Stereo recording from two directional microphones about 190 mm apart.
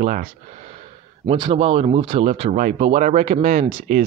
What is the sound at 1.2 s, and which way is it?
Speech, 25° right (ahead or behind).